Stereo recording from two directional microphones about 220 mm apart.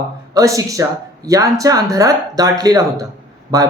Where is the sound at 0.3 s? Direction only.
15° right (ahead or behind).